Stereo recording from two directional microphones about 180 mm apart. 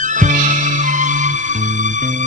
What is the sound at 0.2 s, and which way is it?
Music, 45° right (ahead or behind).